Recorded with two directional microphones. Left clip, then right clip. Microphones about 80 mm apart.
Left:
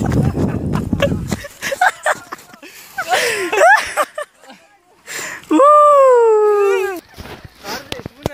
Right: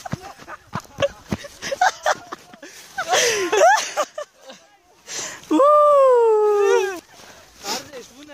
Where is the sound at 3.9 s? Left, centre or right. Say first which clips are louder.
Left 5 dB; left.